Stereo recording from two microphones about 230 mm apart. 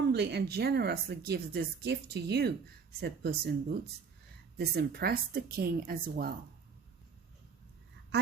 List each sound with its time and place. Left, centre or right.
0.1 s speech: right
4.5 s speech: right
8.1 s speech: right